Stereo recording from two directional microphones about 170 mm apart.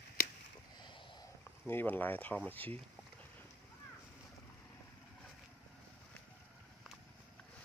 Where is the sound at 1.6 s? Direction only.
10° left (ahead or behind).